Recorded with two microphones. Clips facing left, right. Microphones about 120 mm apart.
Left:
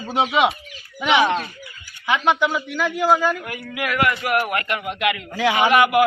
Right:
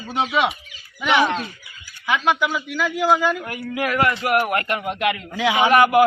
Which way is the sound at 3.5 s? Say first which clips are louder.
Right 2 dB; 35° right (ahead or behind).